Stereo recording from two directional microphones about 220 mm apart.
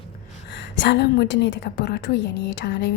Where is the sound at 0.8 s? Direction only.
55° left (ahead or behind).